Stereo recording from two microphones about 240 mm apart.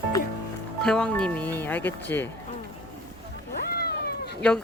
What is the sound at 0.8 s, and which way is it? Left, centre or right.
Speech, centre.